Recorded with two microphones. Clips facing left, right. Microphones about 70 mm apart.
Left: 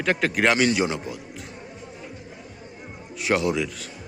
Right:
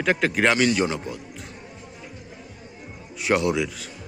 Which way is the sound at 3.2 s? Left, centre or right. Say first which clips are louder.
Right 1 dB; centre.